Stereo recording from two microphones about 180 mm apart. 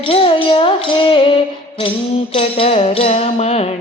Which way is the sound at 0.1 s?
30° left (ahead or behind).